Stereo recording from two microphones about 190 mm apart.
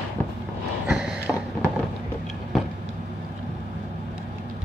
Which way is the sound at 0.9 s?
Centre (ahead or behind).